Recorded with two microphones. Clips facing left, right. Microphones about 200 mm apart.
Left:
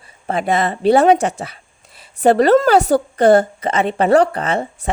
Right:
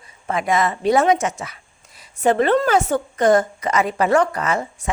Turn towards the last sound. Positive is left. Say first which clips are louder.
# left 4 dB
turn(degrees=30)  # may be behind; listen again after turning